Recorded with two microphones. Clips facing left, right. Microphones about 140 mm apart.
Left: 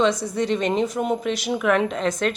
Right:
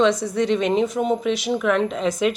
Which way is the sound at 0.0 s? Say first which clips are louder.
Right 2 dB; centre (ahead or behind).